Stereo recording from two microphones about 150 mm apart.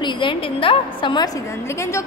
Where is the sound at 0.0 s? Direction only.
30° left (ahead or behind).